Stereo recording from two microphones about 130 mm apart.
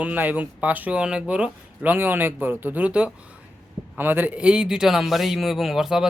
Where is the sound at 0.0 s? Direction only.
10° right (ahead or behind).